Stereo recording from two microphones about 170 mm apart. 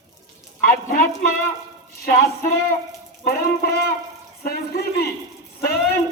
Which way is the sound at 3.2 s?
60° left (ahead or behind).